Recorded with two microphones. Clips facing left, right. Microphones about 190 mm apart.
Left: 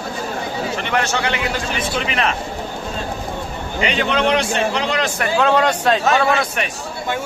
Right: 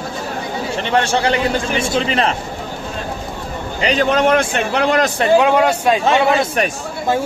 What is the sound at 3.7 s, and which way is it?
A man's voice, 40° right (ahead or behind).